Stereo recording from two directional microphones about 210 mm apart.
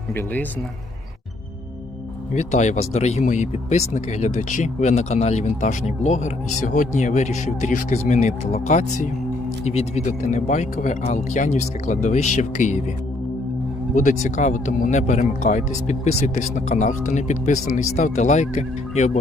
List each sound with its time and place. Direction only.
0.1 s speech: 10° left (ahead or behind)
2.3 s speech: 35° left (ahead or behind)
13.9 s speech: 35° left (ahead or behind)